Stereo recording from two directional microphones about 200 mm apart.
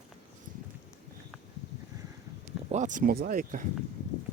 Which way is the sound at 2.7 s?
40° right (ahead or behind).